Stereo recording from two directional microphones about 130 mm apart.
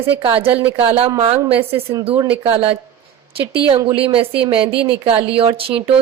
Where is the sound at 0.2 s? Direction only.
40° right (ahead or behind).